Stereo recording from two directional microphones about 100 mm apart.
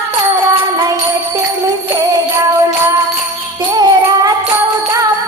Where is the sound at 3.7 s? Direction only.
40° right (ahead or behind).